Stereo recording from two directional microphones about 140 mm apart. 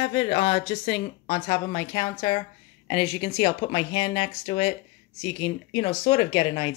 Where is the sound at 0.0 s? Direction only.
45° left (ahead or behind).